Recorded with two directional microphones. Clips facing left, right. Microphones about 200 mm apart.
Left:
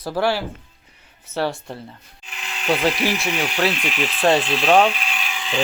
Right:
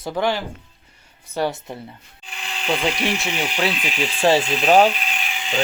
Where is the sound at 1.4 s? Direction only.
20° right (ahead or behind).